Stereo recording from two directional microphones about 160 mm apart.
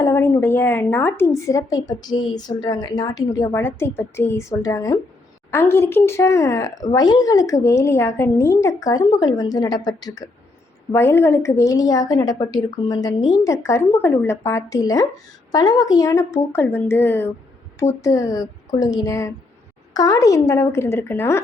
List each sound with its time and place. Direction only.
0.0 s a woman's voice: 20° left (ahead or behind)